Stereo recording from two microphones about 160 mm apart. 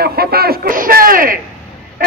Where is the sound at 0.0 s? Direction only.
75° right (ahead or behind).